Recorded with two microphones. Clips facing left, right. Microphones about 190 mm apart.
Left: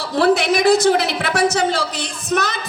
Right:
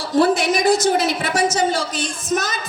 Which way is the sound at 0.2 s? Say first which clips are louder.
Left 1 dB; 60° left (ahead or behind).